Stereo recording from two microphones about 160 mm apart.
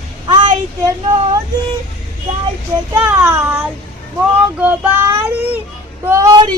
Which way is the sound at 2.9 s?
15° right (ahead or behind).